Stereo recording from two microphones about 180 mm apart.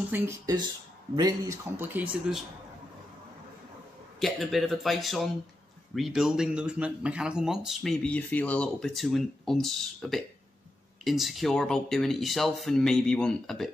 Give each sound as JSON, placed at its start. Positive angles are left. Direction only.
{"t": 0.1, "sound": "speech", "side_deg": -15}
{"t": 1.8, "sound": "speech", "side_deg": -5}
{"t": 4.2, "sound": "speech", "side_deg": 0}